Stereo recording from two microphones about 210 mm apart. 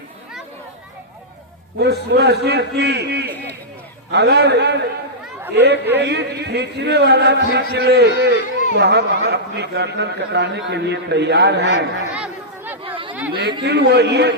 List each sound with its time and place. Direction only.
1.8 s a man's voice: 50° right (ahead or behind)
5.2 s chatter: 10° right (ahead or behind)
5.5 s a man's voice: 55° right (ahead or behind)
12.1 s chatter: 5° right (ahead or behind)
13.7 s a man's voice: 55° right (ahead or behind)